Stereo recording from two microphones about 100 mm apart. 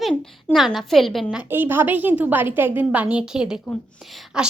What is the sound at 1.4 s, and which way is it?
A woman's voice, 20° right (ahead or behind).